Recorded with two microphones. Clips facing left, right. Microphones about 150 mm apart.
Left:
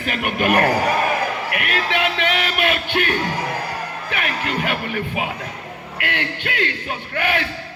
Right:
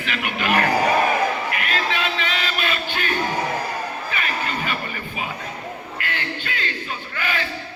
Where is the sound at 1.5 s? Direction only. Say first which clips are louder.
Left 1 dB; 65° left (ahead or behind).